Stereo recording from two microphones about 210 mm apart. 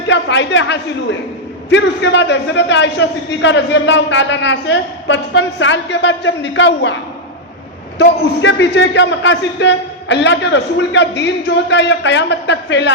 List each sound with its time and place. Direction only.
0.1 s a man's voice: 60° left (ahead or behind)
7.9 s a man's voice: 60° left (ahead or behind)